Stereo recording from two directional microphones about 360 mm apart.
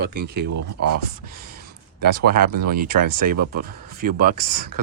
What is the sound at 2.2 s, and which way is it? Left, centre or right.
Speech, right.